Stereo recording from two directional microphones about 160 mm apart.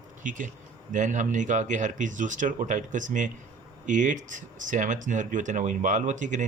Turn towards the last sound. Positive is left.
turn(degrees=-50)  # may be behind; listen again after turning